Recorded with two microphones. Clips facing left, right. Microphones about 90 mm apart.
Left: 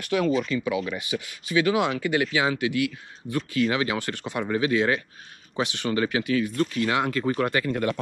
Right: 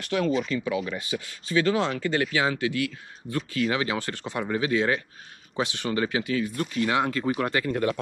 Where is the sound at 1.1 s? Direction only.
15° left (ahead or behind).